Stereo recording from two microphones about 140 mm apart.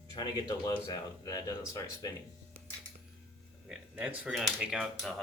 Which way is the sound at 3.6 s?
10° right (ahead or behind).